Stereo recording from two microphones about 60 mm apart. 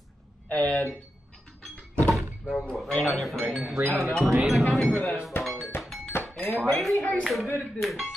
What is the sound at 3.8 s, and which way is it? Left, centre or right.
Speech, right.